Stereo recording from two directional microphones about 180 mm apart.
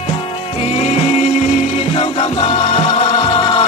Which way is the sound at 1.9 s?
30° left (ahead or behind).